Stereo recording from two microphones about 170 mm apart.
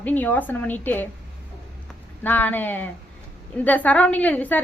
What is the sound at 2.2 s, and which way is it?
Speech, 10° left (ahead or behind).